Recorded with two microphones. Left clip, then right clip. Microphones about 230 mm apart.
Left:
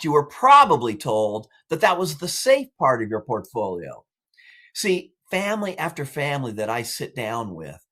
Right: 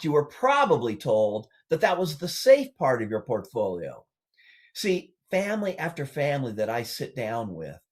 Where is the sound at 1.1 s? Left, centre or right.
Left.